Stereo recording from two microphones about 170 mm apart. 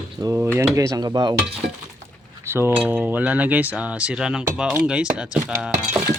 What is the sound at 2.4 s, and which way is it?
Cutlery, 15° right (ahead or behind).